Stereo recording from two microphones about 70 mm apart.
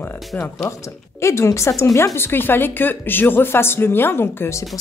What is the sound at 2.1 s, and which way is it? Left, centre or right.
A woman's voice, left.